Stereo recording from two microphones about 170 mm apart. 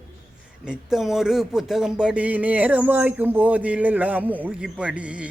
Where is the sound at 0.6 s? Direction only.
5° right (ahead or behind).